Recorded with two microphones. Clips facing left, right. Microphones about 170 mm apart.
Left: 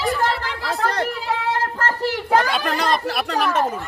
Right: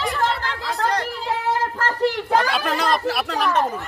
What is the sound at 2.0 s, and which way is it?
Speech, centre (ahead or behind).